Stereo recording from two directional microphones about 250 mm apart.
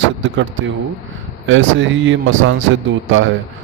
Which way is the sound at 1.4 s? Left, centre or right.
Right.